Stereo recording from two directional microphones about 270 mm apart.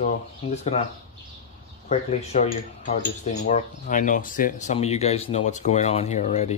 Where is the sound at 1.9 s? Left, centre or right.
Left.